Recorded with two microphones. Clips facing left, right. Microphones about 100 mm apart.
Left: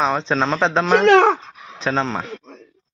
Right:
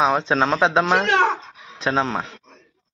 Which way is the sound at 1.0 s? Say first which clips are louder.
Left 7 dB; 65° left (ahead or behind).